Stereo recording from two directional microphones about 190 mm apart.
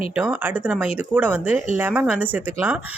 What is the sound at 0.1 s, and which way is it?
Speech, 10° right (ahead or behind).